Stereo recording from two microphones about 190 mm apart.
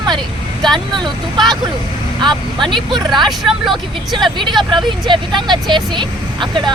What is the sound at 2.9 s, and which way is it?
Speech, 25° right (ahead or behind).